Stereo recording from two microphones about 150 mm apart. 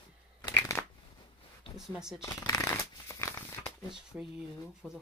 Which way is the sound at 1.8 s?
5° right (ahead or behind).